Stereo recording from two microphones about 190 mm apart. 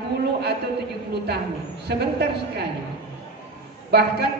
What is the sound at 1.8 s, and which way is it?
Speech, 60° right (ahead or behind).